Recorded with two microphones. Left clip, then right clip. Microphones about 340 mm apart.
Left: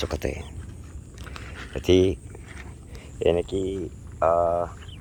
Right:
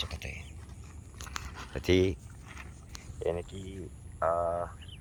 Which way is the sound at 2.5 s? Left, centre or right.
Right.